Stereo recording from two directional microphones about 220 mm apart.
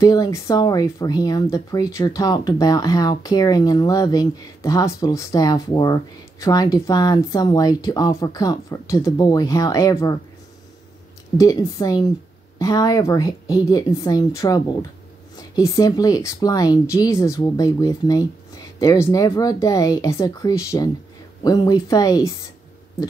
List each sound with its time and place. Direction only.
0.0 s speech: 15° left (ahead or behind)
11.3 s speech: 15° left (ahead or behind)